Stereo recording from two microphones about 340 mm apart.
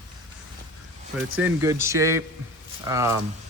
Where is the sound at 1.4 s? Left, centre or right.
Centre.